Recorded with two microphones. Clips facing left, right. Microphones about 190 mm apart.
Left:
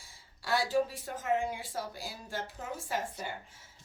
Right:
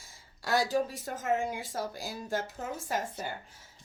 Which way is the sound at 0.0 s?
45° right (ahead or behind).